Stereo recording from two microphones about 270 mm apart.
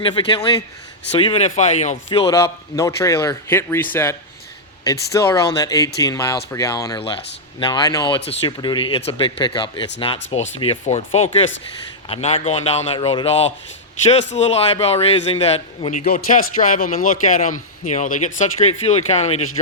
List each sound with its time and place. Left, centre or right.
0.0 s a man's voice: centre
2.2 s a man's voice: centre